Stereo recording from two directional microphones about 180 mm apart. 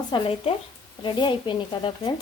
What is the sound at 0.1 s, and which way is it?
Speech, 30° left (ahead or behind).